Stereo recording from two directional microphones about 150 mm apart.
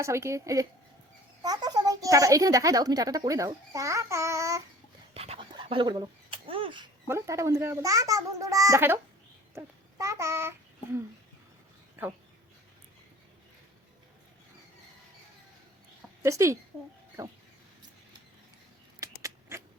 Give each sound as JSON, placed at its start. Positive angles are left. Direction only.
{"t": 0.0, "sound": "speech", "side_deg": -20}
{"t": 5.1, "sound": "dog", "side_deg": -40}
{"t": 5.5, "sound": "bird", "side_deg": -35}
{"t": 7.1, "sound": "a child's voice", "side_deg": -20}
{"t": 16.2, "sound": "speech", "side_deg": -20}
{"t": 18.9, "sound": "a sound", "side_deg": -20}